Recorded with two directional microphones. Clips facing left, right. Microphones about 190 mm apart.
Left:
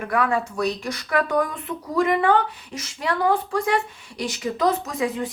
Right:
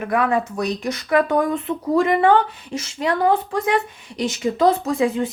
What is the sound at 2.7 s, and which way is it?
A woman's voice, 25° right (ahead or behind).